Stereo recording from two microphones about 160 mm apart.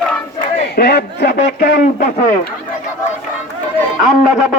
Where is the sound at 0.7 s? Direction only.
90° left.